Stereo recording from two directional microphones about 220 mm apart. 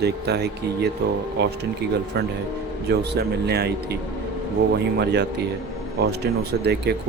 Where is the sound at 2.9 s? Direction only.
50° right (ahead or behind).